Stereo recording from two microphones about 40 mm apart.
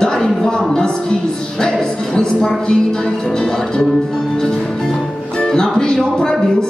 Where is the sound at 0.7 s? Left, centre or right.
Centre.